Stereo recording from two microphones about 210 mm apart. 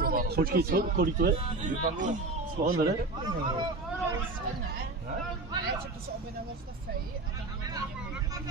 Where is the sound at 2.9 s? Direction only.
20° right (ahead or behind).